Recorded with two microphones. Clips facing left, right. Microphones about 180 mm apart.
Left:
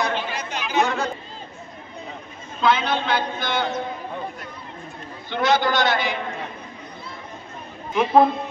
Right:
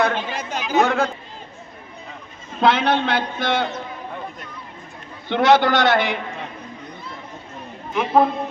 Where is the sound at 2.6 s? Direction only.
80° right.